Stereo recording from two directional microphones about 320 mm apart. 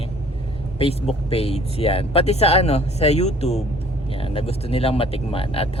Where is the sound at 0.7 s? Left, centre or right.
Centre.